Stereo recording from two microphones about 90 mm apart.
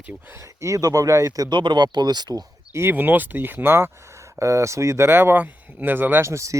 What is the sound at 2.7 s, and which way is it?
Speech, 25° right (ahead or behind).